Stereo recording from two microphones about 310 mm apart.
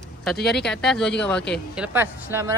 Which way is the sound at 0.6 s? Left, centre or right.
Centre.